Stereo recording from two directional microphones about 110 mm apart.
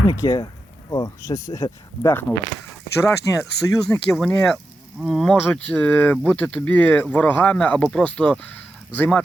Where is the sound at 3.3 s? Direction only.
25° left (ahead or behind).